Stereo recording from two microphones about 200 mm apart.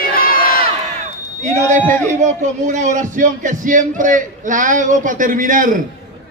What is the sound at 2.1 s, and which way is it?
A man's voice, 35° right (ahead or behind).